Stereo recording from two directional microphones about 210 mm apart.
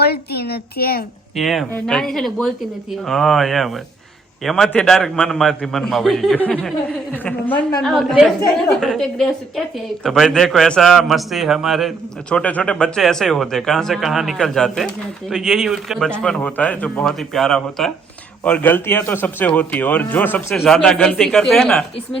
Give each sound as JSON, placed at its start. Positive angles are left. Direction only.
{"t": 0.0, "sound": "speech", "side_deg": 50}
{"t": 1.4, "sound": "a man's voice", "side_deg": 0}